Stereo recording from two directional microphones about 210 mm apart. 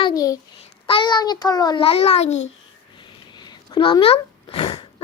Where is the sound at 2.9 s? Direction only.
20° left (ahead or behind).